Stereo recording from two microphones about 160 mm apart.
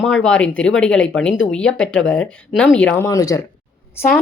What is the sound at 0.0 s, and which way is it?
A woman's voice, 5° left (ahead or behind).